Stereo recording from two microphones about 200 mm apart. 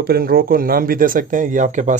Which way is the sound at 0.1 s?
50° right (ahead or behind).